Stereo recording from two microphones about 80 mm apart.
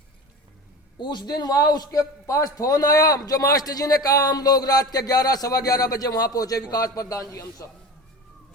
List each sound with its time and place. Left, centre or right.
0.9 s a man's voice: left